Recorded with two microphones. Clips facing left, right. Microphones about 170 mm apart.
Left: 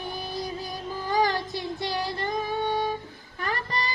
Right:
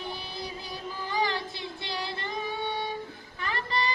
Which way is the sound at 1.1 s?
40° left (ahead or behind).